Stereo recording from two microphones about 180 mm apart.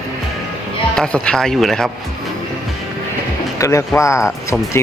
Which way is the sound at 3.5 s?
15° left (ahead or behind).